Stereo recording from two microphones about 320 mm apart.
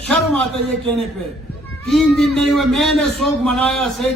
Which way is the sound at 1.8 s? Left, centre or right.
Centre.